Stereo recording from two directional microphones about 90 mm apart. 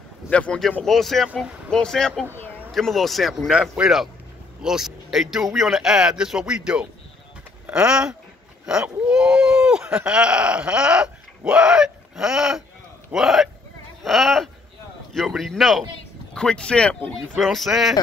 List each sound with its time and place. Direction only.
0.3 s speech: 10° left (ahead or behind)
2.3 s a sound: 20° left (ahead or behind)
2.7 s speech: centre (ahead or behind)
17.4 s speech: centre (ahead or behind)